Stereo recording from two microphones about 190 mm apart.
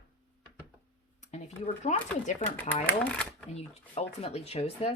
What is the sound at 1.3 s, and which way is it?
Speech, 35° left (ahead or behind).